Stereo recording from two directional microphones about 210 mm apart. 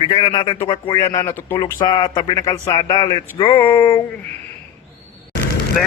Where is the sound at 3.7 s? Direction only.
10° left (ahead or behind).